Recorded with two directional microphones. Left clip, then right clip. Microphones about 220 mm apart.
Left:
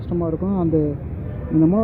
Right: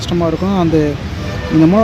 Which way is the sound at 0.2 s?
25° right (ahead or behind).